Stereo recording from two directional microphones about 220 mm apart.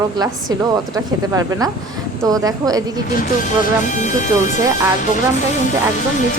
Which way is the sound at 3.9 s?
35° left (ahead or behind).